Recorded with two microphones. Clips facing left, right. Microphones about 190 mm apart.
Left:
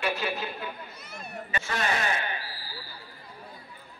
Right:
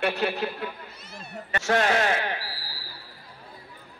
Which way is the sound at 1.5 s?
80° right.